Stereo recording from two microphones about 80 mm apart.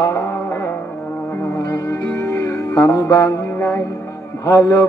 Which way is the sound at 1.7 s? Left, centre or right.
Left.